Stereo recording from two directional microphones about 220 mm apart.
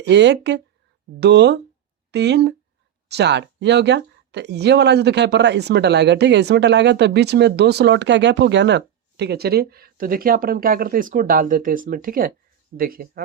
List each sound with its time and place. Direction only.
0.1 s speech: 50° right (ahead or behind)